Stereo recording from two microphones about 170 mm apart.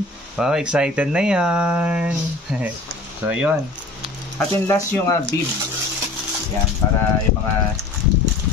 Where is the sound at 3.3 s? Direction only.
5° right (ahead or behind).